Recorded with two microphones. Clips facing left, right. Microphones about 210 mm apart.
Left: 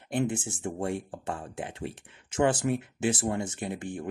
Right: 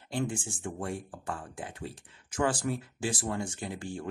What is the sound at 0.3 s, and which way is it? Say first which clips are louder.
Speech: left 4 dB; 20° left (ahead or behind).